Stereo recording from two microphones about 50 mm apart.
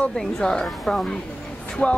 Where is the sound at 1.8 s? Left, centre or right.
Left.